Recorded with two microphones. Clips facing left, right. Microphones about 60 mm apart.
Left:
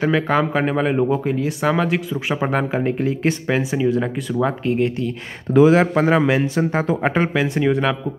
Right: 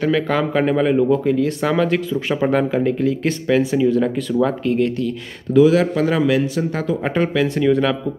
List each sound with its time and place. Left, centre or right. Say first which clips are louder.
0.0 s a man's voice: even; centre